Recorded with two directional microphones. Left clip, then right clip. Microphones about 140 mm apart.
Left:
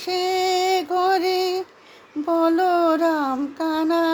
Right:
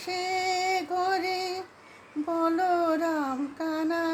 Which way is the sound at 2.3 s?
45° left (ahead or behind).